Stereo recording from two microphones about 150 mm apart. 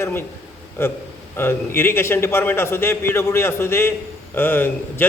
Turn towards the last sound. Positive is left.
turn(degrees=15)  # may be behind; listen again after turning